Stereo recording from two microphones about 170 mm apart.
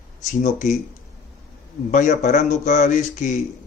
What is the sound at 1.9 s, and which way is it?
A man's voice, 45° left (ahead or behind).